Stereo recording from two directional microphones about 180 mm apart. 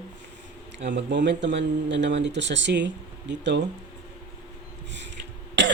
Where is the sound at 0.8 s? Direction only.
75° right (ahead or behind).